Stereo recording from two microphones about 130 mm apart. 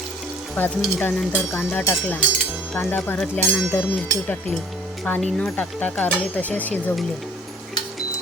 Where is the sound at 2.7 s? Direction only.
15° left (ahead or behind).